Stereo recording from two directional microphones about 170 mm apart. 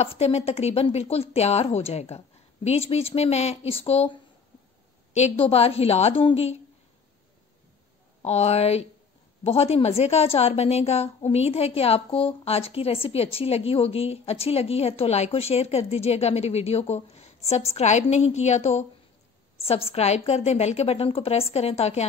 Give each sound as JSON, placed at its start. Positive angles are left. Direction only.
{"t": 0.0, "sound": "a woman's voice", "side_deg": 40}
{"t": 8.2, "sound": "a woman's voice", "side_deg": 40}